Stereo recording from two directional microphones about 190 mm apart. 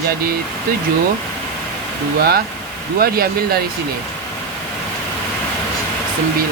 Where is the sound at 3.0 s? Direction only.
50° right (ahead or behind).